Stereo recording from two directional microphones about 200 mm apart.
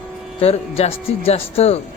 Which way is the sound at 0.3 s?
30° left (ahead or behind).